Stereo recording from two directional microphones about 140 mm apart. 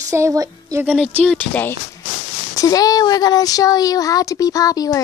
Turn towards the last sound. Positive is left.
turn(degrees=25)  # may be behind; listen again after turning